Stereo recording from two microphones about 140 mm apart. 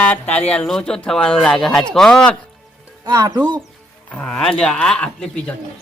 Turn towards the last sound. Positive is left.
turn(degrees=5)  # may be behind; listen again after turning